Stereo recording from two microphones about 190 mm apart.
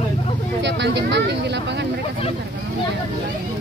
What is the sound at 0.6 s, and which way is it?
Speech, 65° right (ahead or behind).